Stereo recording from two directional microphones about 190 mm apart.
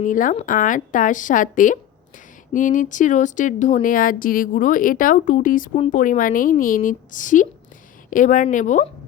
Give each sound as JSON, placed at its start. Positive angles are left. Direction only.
{"t": 0.0, "sound": "a woman's voice", "side_deg": 45}